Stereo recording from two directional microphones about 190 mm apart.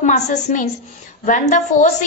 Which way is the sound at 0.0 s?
40° left (ahead or behind).